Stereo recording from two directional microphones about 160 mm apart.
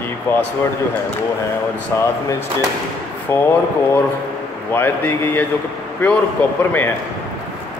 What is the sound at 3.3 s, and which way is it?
Speech, 15° left (ahead or behind).